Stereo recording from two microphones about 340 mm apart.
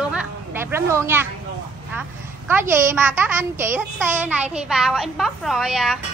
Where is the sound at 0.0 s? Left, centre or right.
Centre.